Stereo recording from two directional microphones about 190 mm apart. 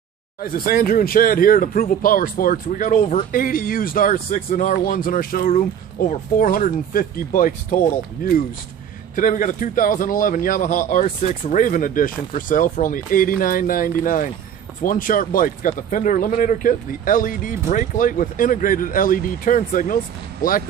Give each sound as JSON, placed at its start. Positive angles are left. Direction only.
{"t": 0.4, "sound": "speech", "side_deg": 50}